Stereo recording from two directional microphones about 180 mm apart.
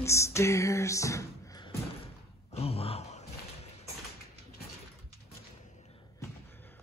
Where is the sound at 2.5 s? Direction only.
35° left (ahead or behind).